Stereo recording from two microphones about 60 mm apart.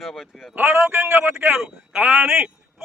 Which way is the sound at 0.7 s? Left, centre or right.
Right.